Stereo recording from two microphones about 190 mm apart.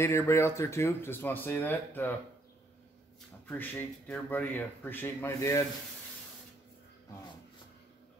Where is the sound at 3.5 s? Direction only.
10° left (ahead or behind).